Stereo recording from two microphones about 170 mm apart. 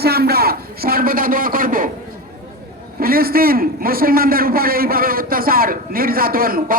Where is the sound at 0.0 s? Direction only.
65° right (ahead or behind).